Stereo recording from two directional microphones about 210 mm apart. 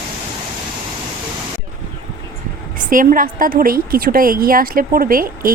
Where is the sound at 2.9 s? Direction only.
40° right (ahead or behind).